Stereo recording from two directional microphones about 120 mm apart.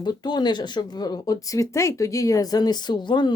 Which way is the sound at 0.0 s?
35° left (ahead or behind).